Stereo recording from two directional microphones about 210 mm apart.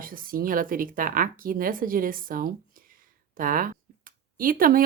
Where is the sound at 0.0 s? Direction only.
40° right (ahead or behind).